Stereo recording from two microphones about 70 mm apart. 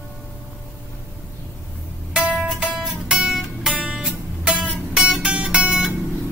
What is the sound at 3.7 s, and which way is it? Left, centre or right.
Guitar, centre.